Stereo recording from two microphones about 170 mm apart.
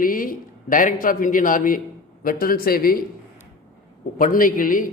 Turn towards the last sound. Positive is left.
turn(degrees=55)  # may be behind; listen again after turning